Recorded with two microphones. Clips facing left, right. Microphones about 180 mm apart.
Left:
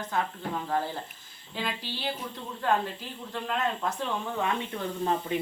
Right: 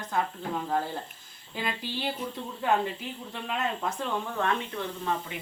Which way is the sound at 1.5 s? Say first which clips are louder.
Right 1 dB; centre (ahead or behind).